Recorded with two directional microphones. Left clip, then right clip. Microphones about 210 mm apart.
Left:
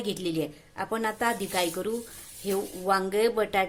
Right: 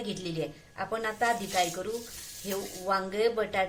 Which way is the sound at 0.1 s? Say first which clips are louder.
Left 8 dB; 45° left (ahead or behind).